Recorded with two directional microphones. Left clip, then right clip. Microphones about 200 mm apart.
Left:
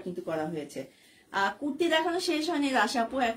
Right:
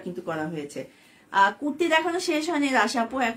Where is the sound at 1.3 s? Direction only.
20° right (ahead or behind).